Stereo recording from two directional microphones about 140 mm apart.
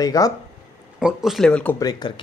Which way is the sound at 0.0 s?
25° left (ahead or behind).